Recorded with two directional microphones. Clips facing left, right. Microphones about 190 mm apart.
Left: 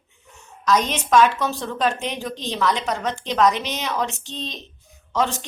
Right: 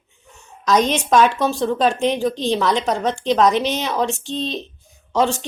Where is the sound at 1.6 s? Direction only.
30° right (ahead or behind).